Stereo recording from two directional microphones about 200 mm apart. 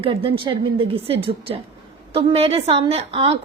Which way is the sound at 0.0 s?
25° right (ahead or behind).